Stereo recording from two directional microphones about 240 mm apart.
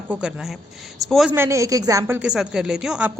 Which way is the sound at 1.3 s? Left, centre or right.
Centre.